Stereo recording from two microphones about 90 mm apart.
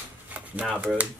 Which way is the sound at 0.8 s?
15° right (ahead or behind).